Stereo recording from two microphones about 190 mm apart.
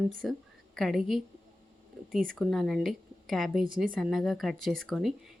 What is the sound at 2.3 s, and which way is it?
A woman's voice, centre (ahead or behind).